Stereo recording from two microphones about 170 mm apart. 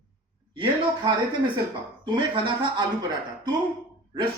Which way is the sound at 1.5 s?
25° right (ahead or behind).